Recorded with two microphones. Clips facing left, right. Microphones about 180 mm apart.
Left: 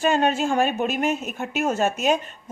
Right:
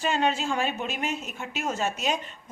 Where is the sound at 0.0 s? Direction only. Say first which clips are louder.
Left 5 dB; 50° left (ahead or behind).